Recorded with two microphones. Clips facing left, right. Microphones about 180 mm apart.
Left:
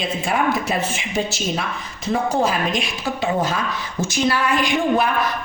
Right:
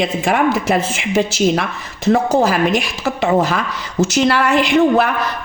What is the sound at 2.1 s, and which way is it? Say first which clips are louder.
Speech: right 6 dB; 85° right.